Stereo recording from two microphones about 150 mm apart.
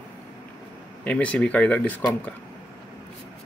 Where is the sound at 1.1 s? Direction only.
10° left (ahead or behind).